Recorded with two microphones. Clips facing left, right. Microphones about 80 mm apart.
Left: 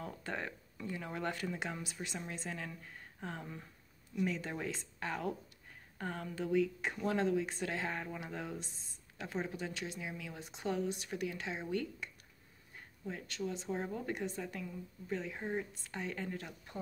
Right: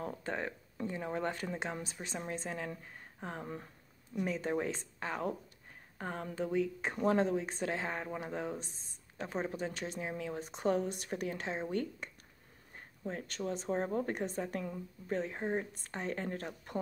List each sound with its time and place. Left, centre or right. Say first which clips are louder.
0.0 s a woman's voice: right 3 dB; right